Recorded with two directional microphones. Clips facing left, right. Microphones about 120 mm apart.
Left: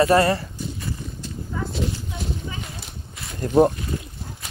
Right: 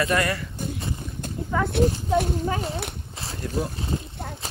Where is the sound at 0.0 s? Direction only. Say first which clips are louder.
Left 7 dB; 30° left (ahead or behind).